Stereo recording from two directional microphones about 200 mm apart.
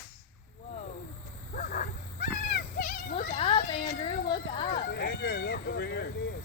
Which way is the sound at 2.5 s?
50° left (ahead or behind).